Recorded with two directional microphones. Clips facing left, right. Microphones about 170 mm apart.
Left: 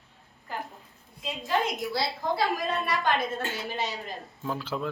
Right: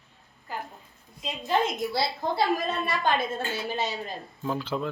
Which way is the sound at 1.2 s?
25° right (ahead or behind).